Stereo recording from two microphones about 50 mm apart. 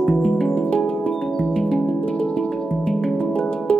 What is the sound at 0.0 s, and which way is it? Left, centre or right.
Music, centre.